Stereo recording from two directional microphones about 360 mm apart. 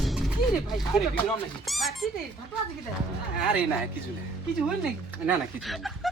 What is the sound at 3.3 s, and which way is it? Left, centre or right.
Speech, centre.